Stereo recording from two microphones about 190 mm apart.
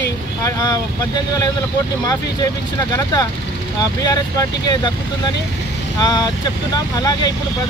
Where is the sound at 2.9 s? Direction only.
20° left (ahead or behind).